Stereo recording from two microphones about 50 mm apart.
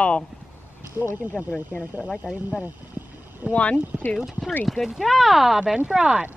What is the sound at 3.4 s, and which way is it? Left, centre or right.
Speech, right.